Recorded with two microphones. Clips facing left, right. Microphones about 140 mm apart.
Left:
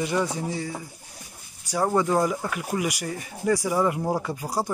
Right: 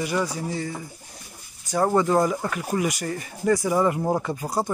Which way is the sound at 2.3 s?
5° left (ahead or behind).